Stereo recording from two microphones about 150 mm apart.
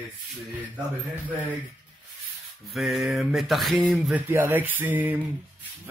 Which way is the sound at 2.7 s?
Centre (ahead or behind).